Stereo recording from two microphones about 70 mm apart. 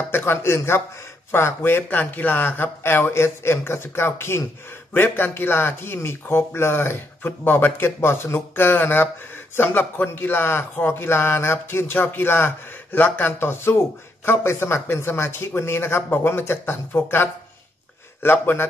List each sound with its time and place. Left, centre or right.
0.1 s a man's voice: left